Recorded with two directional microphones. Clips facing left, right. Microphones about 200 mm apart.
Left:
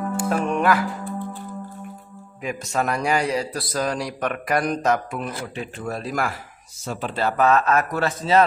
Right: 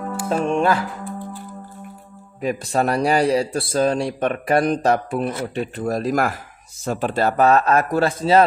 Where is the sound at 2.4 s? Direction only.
35° right (ahead or behind).